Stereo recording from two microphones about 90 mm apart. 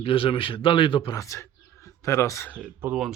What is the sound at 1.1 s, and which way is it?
Speech, 35° left (ahead or behind).